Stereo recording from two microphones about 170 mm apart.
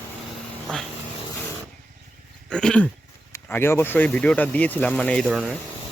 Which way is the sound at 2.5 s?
5° left (ahead or behind).